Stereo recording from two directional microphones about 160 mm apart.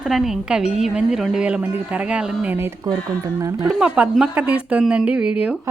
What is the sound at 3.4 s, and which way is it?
Speech, 20° right (ahead or behind).